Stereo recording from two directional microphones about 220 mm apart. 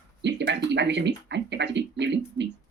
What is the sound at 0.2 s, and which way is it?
Speech, 50° right (ahead or behind).